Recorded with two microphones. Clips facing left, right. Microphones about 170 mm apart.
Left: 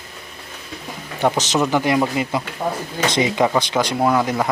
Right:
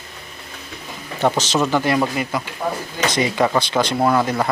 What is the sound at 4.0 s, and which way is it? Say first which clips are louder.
Speech: even; centre (ahead or behind).